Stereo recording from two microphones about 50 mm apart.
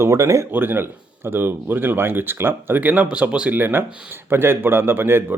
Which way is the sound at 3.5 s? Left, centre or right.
Right.